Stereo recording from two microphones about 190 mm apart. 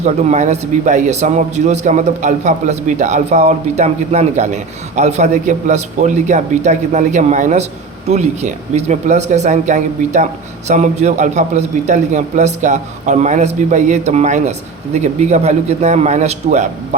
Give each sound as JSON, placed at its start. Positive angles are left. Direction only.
{"t": 0.0, "sound": "a man's voice", "side_deg": -35}